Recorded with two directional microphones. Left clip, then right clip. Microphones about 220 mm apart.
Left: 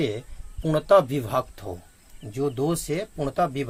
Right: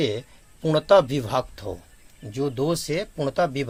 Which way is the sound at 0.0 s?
40° right (ahead or behind).